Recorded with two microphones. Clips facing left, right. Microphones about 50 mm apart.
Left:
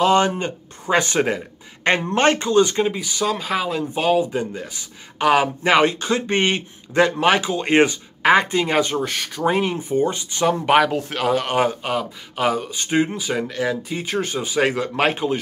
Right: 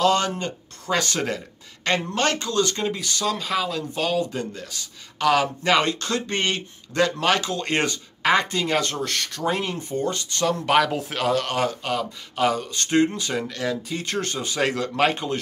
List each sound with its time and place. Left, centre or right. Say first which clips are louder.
0.0 s speech: left 4 dB; left
10.9 s speech: left 3 dB; centre